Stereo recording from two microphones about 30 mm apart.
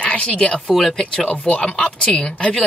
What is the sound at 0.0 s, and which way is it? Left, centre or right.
Speech, left.